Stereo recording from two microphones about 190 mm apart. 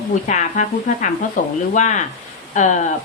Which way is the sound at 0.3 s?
40° left (ahead or behind).